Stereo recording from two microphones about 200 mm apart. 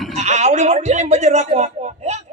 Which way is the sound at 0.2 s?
35° right (ahead or behind).